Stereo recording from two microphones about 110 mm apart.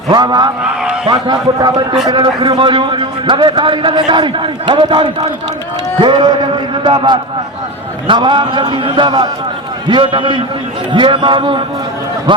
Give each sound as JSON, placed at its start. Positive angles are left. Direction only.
{"t": 0.1, "sound": "a man's voice", "side_deg": -40}
{"t": 0.6, "sound": "a man's voice", "side_deg": -10}
{"t": 1.0, "sound": "a man's voice", "side_deg": -45}